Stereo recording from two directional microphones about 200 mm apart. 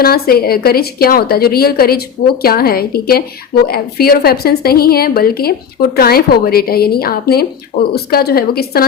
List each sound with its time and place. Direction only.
0.0 s a woman's voice: 50° left (ahead or behind)